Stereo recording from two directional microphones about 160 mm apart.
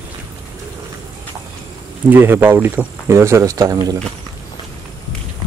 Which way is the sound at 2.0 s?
10° right (ahead or behind).